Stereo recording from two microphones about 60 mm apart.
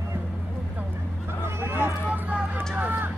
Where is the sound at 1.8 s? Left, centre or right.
Right.